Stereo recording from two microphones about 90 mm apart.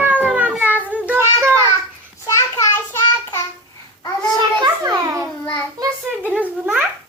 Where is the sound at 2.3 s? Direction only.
35° left (ahead or behind).